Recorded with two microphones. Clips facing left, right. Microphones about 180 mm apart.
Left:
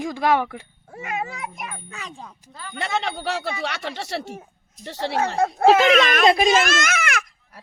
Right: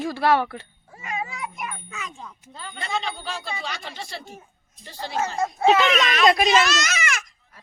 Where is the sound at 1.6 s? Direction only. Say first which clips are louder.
Right 1 dB; 35° left (ahead or behind).